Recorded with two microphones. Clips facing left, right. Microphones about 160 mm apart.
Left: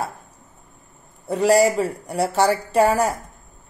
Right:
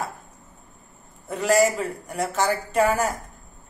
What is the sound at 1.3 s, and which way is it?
A woman's voice, 35° left (ahead or behind).